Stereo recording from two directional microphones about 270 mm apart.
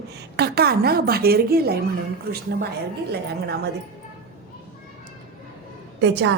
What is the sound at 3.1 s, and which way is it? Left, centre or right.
Speech, right.